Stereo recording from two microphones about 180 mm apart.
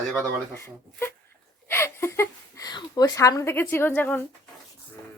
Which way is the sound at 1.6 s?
15° left (ahead or behind).